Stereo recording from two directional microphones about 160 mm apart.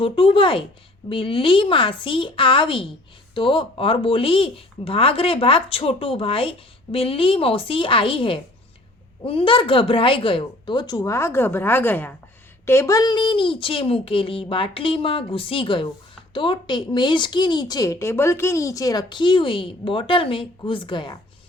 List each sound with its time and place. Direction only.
0.0 s speech: 35° left (ahead or behind)